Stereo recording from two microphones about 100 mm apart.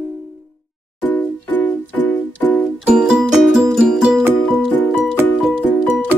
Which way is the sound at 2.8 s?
10° right (ahead or behind).